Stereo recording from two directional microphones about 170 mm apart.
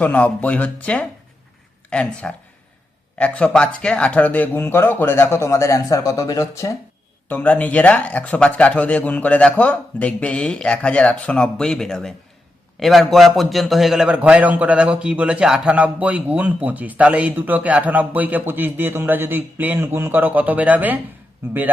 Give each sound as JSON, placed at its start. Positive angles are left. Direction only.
{"t": 0.0, "sound": "a man's voice", "side_deg": 10}